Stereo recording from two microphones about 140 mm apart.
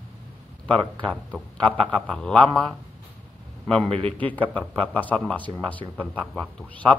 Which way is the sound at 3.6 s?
5° left (ahead or behind).